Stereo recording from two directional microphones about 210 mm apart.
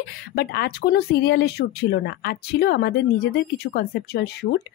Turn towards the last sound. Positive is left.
turn(degrees=50)  # may be behind; listen again after turning